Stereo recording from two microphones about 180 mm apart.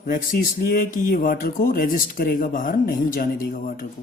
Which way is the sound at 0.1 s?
50° left (ahead or behind).